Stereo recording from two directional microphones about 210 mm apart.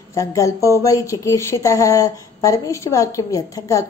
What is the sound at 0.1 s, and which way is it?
Speech, 15° left (ahead or behind).